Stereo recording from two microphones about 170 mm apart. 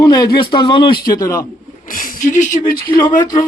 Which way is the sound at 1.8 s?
50° left (ahead or behind).